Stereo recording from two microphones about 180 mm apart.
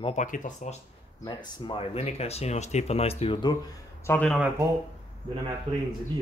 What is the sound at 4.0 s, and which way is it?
Speech, 10° left (ahead or behind).